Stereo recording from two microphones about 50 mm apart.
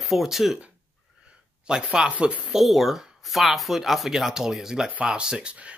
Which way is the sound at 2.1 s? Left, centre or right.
Right.